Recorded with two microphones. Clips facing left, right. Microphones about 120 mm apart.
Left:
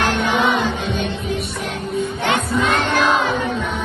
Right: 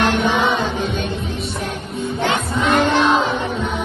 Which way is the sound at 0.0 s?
25° right (ahead or behind).